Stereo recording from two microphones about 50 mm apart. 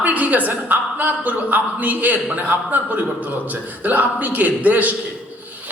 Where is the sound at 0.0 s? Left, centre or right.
Right.